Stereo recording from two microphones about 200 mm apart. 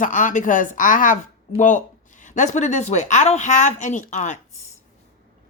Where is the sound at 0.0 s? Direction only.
40° left (ahead or behind).